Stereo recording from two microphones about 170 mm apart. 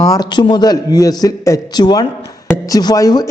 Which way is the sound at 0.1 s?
25° left (ahead or behind).